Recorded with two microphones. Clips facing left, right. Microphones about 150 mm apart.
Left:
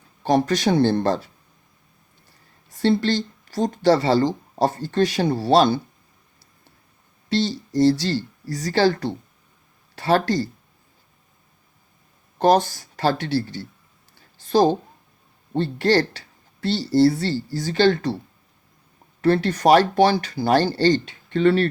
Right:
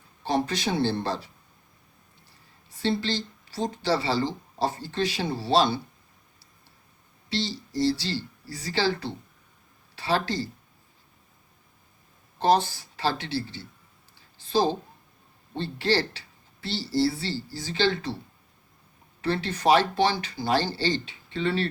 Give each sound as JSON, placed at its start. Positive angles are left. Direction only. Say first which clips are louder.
{"t": 0.2, "sound": "speech", "louder": "left 7 dB", "side_deg": 45}
{"t": 2.7, "sound": "speech", "louder": "left 7 dB", "side_deg": 55}
{"t": 7.3, "sound": "speech", "louder": "left 8 dB", "side_deg": 50}
{"t": 12.4, "sound": "speech", "louder": "left 5 dB", "side_deg": 45}
{"t": 14.2, "sound": "a sound", "louder": "left 7 dB", "side_deg": 50}
{"t": 15.5, "sound": "speech", "louder": "left 7 dB", "side_deg": 50}
{"t": 19.2, "sound": "speech", "louder": "left 7 dB", "side_deg": 50}